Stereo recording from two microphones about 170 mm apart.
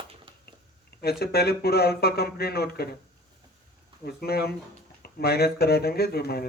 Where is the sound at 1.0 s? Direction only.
70° left (ahead or behind).